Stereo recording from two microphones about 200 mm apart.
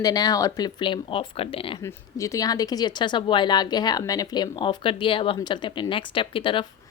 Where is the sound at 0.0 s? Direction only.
20° left (ahead or behind).